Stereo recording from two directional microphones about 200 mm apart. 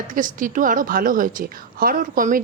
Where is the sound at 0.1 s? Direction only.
40° right (ahead or behind).